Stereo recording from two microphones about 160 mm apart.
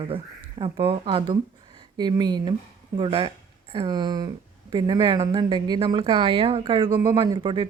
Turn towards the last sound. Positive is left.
turn(degrees=-30)  # may be behind; listen again after turning